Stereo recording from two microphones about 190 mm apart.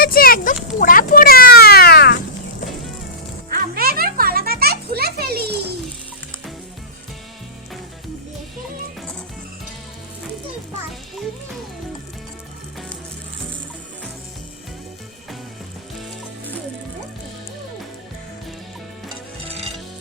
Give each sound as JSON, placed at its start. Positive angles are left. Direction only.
{"t": 0.0, "sound": "a sound", "side_deg": 50}
{"t": 3.5, "sound": "music", "side_deg": -50}
{"t": 19.0, "sound": "music", "side_deg": -30}